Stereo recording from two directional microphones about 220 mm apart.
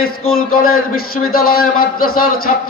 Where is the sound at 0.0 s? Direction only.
70° left (ahead or behind).